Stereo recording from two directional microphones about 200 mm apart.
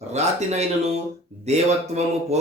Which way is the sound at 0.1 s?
35° right (ahead or behind).